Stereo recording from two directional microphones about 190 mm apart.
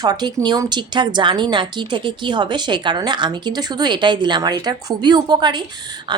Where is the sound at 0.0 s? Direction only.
20° right (ahead or behind).